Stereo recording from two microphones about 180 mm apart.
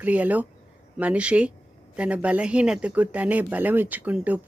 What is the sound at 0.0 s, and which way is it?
Speech, 10° right (ahead or behind).